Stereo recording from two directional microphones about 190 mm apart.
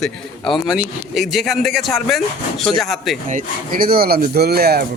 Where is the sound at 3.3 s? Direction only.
45° right (ahead or behind).